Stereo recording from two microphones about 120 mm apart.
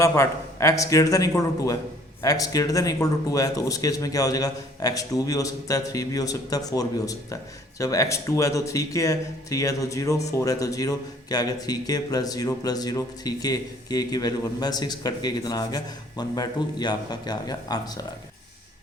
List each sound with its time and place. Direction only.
0.0 s speech: 25° left (ahead or behind)